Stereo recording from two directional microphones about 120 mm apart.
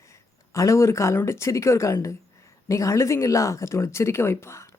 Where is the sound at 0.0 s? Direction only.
25° left (ahead or behind).